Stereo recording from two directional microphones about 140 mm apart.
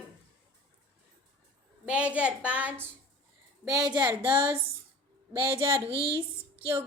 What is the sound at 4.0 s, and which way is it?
A woman's voice, 15° right (ahead or behind).